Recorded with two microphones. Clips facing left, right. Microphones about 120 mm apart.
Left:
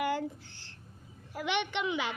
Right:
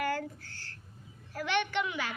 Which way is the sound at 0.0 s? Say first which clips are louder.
Left 1 dB; 20° left (ahead or behind).